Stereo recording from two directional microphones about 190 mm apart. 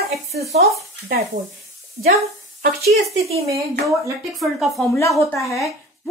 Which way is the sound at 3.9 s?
15° right (ahead or behind).